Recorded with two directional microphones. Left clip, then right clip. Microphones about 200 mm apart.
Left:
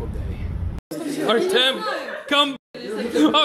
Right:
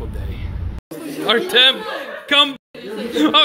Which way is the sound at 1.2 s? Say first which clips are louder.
Right 5 dB; 10° left (ahead or behind).